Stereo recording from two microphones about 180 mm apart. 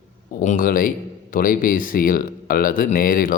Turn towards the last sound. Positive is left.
turn(degrees=50)  # may be behind; listen again after turning